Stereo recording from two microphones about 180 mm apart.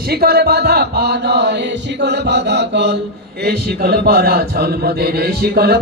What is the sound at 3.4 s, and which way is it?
Speech, 60° right (ahead or behind).